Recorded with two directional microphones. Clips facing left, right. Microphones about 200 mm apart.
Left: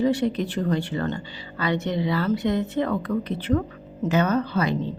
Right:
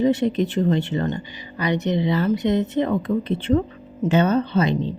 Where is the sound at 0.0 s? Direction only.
20° right (ahead or behind).